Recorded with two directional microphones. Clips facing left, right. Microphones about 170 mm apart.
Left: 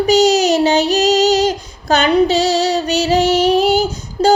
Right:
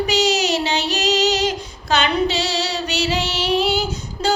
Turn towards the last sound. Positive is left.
turn(degrees=40)  # may be behind; listen again after turning